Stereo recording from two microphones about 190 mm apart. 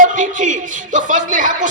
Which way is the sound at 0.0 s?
40° right (ahead or behind).